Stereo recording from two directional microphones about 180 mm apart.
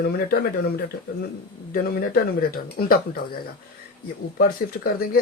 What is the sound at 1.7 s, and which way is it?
Speech, 55° left (ahead or behind).